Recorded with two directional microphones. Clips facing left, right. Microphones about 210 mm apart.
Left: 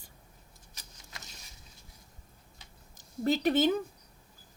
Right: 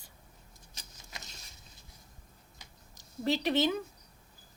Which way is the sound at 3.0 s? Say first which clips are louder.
Left 2 dB; 50° left (ahead or behind).